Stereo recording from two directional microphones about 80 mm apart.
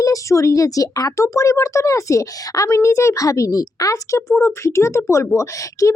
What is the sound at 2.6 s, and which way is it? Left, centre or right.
A child's voice, left.